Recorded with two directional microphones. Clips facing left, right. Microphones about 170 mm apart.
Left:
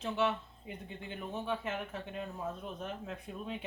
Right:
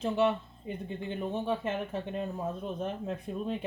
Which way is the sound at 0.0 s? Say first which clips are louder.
Right 5 dB; 35° right (ahead or behind).